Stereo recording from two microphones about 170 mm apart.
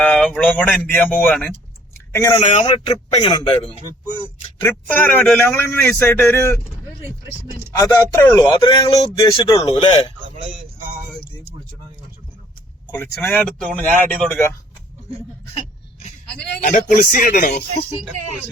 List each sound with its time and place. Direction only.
0.0 s speech: 5° left (ahead or behind)
2.1 s speech: 20° left (ahead or behind)
2.4 s speech: 40° left (ahead or behind)
4.6 s speech: 10° left (ahead or behind)
7.8 s speech: 20° left (ahead or behind)
10.3 s music: 45° right (ahead or behind)
13.2 s speech: 10° left (ahead or behind)
16.6 s speech: 45° left (ahead or behind)